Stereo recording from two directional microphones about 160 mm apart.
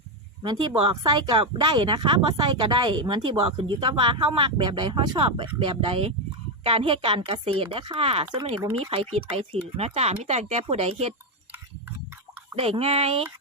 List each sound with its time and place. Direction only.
0.4 s speech: 25° right (ahead or behind)
12.5 s speech: 40° right (ahead or behind)